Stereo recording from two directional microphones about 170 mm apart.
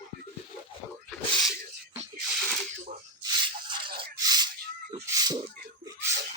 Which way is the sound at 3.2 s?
30° right (ahead or behind).